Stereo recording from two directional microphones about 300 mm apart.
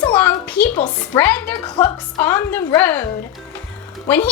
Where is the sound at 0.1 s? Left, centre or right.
Centre.